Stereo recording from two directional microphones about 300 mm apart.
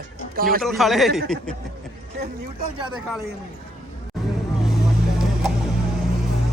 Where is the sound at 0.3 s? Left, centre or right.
Right.